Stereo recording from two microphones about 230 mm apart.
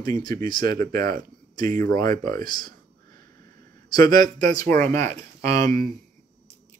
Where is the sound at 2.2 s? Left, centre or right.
Centre.